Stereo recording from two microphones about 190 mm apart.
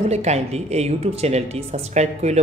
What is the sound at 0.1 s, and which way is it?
Speech, 35° right (ahead or behind).